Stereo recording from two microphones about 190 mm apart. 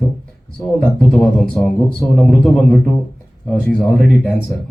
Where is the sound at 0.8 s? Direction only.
Centre (ahead or behind).